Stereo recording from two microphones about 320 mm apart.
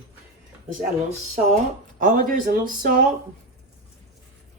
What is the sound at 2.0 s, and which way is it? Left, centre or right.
Speech, right.